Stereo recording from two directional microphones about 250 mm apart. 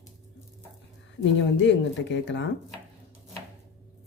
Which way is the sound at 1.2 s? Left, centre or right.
Left.